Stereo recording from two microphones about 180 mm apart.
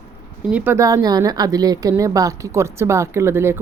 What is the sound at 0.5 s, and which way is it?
Speech, 10° right (ahead or behind).